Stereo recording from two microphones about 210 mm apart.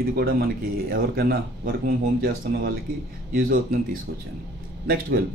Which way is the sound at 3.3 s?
45° right (ahead or behind).